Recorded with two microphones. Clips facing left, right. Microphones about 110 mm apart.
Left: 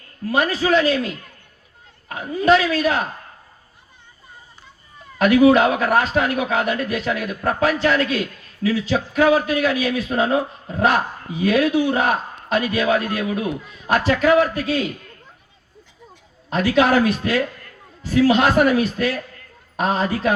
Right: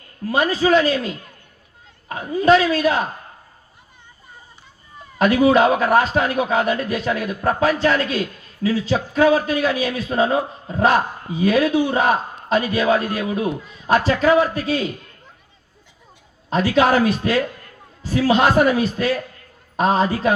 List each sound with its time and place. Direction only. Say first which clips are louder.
0.5 s a man's voice: right 3 dB; 40° right (ahead or behind)
2.0 s a woman's voice: right 1 dB; 30° right (ahead or behind)
5.1 s a man's voice: left 1 dB; 35° right (ahead or behind)
16.7 s a man's voice: even; 35° right (ahead or behind)